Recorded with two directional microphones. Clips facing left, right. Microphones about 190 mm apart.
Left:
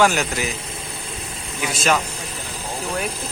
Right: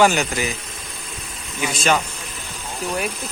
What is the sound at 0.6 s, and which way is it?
Vehicle, 30° left (ahead or behind).